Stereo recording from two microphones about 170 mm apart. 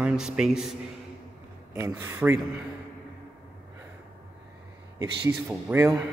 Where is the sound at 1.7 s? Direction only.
15° right (ahead or behind).